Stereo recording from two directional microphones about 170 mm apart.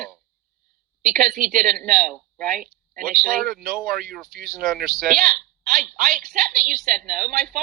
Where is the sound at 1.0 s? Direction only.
55° right (ahead or behind).